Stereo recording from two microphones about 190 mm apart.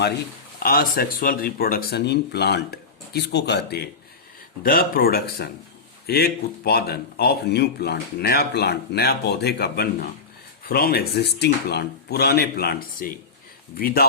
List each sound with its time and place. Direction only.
0.6 s speech: 50° left (ahead or behind)